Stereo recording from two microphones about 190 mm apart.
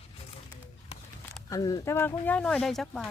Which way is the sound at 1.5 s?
20° left (ahead or behind).